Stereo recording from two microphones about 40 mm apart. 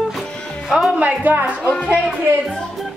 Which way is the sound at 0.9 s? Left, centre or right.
Right.